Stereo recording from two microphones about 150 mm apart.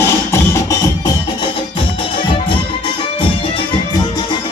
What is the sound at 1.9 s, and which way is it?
Music, 40° left (ahead or behind).